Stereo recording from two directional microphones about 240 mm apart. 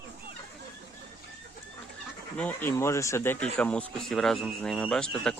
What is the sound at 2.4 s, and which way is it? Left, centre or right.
Speech, centre.